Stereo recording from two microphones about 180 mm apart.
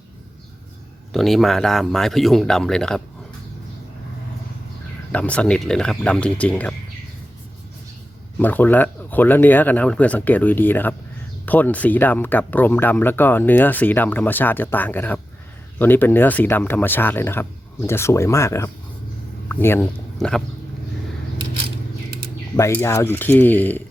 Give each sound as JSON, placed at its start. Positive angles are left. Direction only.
{"t": 1.1, "sound": "speech", "side_deg": 0}
{"t": 5.1, "sound": "speech", "side_deg": 5}
{"t": 8.4, "sound": "speech", "side_deg": 10}
{"t": 20.1, "sound": "a sound", "side_deg": 5}
{"t": 22.5, "sound": "speech", "side_deg": 15}